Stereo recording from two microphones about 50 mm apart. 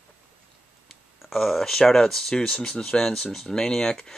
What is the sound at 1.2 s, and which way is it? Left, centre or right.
Speech, centre.